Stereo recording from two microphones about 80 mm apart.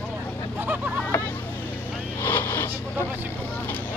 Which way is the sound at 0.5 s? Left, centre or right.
Right.